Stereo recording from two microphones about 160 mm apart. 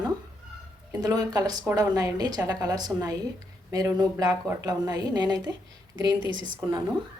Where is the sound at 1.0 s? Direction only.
25° right (ahead or behind).